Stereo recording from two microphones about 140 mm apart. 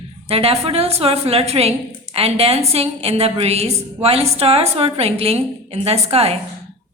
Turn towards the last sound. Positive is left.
turn(degrees=-45)  # may be behind; listen again after turning